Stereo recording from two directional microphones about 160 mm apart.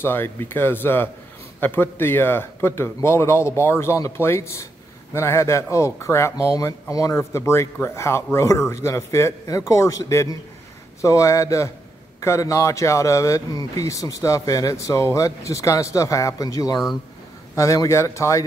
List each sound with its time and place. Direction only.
0.0 s speech: 15° left (ahead or behind)